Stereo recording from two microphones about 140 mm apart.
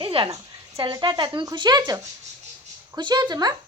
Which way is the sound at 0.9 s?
35° right (ahead or behind).